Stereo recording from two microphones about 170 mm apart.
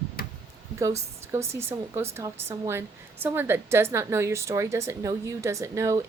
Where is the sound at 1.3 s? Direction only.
15° right (ahead or behind).